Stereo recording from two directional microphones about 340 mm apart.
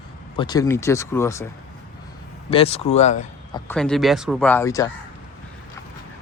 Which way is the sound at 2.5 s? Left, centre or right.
Centre.